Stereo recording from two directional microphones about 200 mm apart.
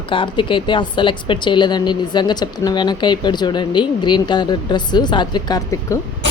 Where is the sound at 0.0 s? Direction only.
25° left (ahead or behind).